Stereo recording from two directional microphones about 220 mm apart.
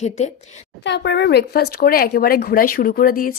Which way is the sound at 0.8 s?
55° left (ahead or behind).